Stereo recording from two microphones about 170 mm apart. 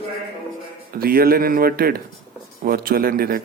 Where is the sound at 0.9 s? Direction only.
60° right (ahead or behind).